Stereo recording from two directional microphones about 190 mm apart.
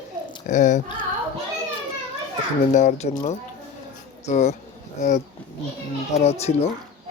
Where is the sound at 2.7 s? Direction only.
40° left (ahead or behind).